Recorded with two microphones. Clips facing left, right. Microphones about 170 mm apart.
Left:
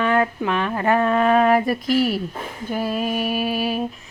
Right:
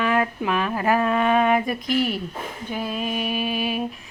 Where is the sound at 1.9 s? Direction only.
40° left (ahead or behind).